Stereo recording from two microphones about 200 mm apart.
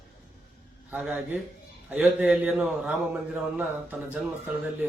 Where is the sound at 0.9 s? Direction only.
5° right (ahead or behind).